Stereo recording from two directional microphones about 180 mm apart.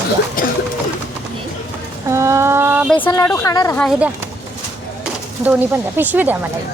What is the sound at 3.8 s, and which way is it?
Speech, 5° right (ahead or behind).